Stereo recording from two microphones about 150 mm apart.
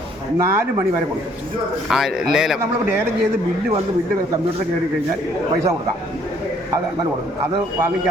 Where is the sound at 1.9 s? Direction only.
5° right (ahead or behind).